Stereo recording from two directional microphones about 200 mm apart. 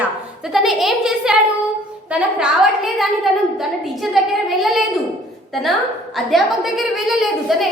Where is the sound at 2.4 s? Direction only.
Centre (ahead or behind).